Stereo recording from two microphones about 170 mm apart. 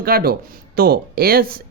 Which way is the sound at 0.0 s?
65° right (ahead or behind).